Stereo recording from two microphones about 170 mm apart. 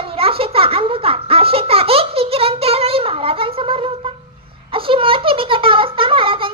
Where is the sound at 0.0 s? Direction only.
35° right (ahead or behind).